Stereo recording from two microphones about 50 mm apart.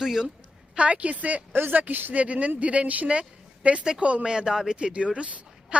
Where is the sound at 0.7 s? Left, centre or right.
Right.